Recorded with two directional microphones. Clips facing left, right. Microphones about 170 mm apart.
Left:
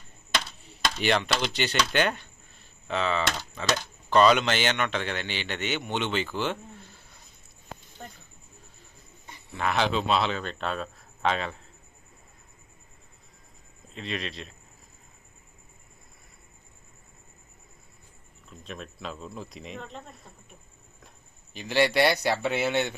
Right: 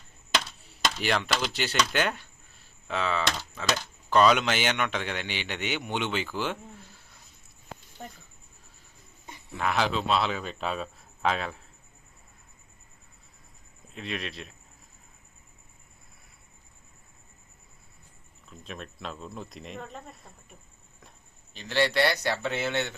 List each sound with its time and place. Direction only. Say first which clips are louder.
0.9 s speech: left 2 dB; centre (ahead or behind)
9.6 s speech: left 1 dB; centre (ahead or behind)
13.9 s speech: left 1 dB; centre (ahead or behind)
18.4 s speech: left 1 dB; centre (ahead or behind)
21.5 s speech: left 2 dB; 10° left (ahead or behind)